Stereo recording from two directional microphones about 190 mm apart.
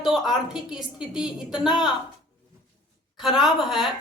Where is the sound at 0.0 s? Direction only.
Centre (ahead or behind).